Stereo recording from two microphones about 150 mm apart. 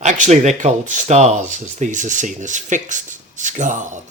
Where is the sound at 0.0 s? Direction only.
50° right (ahead or behind).